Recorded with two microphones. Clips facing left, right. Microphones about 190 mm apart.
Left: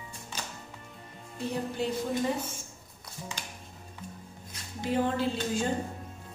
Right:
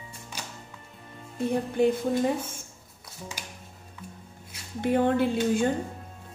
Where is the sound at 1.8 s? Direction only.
50° right (ahead or behind).